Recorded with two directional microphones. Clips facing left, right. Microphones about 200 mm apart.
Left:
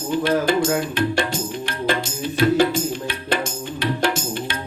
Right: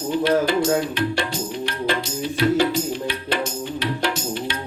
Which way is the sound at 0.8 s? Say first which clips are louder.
Left 1 dB; 50° left (ahead or behind).